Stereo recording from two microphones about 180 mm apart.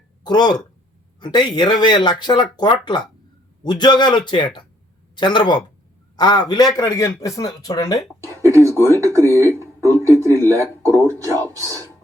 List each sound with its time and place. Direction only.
0.3 s speech: 25° left (ahead or behind)
8.3 s speech: 15° right (ahead or behind)